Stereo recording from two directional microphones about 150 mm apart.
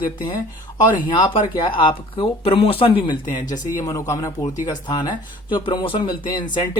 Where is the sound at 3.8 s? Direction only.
20° left (ahead or behind).